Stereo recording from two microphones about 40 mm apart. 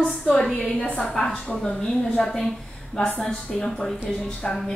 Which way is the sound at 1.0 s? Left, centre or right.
Centre.